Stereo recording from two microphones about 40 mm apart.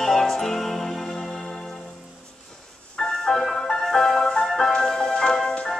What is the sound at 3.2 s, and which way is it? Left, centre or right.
Music, centre.